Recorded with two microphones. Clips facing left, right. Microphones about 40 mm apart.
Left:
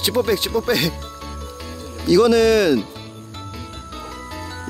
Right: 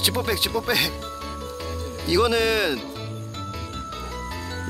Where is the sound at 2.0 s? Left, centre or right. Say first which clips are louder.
Left 7 dB; centre.